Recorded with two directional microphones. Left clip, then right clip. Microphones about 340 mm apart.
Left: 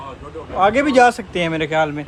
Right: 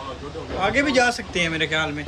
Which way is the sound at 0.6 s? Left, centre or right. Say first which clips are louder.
Left 6 dB; centre.